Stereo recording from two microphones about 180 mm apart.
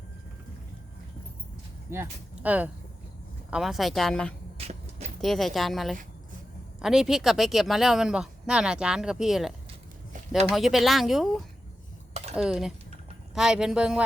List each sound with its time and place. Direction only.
1.9 s speech: 10° right (ahead or behind)
4.5 s a sound: 35° right (ahead or behind)
5.2 s speech: centre (ahead or behind)
10.5 s speech: centre (ahead or behind)